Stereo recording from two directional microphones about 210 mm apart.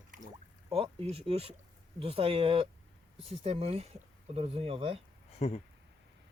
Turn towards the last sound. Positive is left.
turn(degrees=30)  # may be behind; listen again after turning